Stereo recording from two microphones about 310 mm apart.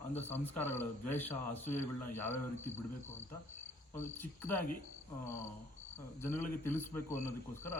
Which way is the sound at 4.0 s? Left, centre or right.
Centre.